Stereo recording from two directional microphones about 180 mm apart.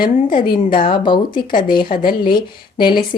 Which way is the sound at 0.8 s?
25° left (ahead or behind).